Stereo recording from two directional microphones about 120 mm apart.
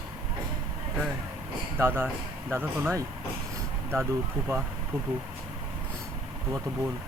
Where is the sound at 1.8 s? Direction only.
20° right (ahead or behind).